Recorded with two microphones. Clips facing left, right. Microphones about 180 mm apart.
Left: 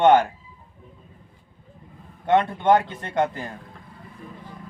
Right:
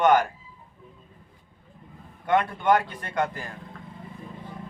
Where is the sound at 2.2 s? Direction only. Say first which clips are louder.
Left 3 dB; 25° left (ahead or behind).